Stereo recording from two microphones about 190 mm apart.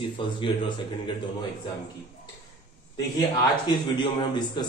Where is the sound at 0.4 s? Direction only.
25° left (ahead or behind).